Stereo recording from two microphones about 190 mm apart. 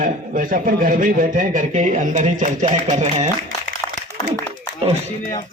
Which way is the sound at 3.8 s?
15° left (ahead or behind).